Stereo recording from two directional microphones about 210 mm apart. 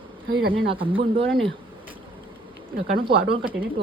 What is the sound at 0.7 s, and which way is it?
Speech, 25° right (ahead or behind).